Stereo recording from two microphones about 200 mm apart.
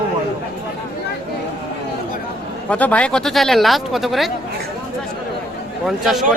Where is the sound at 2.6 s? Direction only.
5° left (ahead or behind).